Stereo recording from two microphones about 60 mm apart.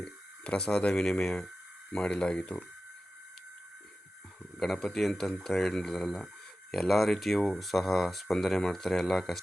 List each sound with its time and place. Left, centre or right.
0.0 s speech: centre
4.5 s speech: centre